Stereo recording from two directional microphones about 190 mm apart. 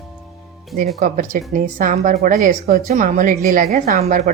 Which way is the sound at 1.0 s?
50° right (ahead or behind).